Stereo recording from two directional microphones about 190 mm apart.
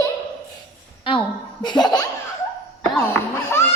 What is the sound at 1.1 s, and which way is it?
Speech, 25° left (ahead or behind).